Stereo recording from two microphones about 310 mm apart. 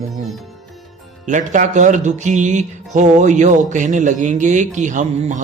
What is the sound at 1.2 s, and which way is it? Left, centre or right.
Speech, right.